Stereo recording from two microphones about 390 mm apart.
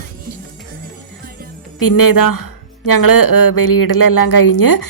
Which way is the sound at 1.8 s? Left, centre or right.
Left.